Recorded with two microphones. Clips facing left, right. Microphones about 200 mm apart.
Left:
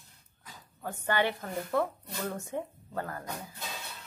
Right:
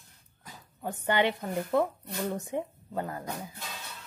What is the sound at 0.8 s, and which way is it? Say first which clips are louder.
A woman's voice: right 3 dB; 20° right (ahead or behind).